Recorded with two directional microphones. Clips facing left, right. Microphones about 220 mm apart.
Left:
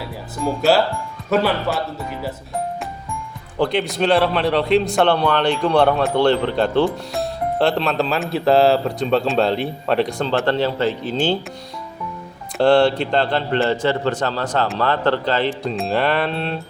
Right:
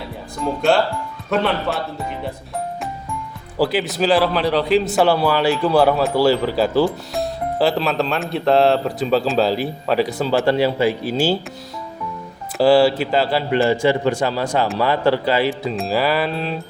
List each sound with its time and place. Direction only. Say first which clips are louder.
0.4 s speech: left 1 dB; 5° left (ahead or behind)
3.6 s speech: even; 5° right (ahead or behind)
12.5 s a man's voice: right 1 dB; 5° right (ahead or behind)